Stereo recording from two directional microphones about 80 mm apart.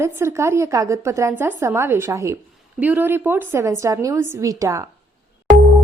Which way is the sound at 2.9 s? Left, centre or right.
Right.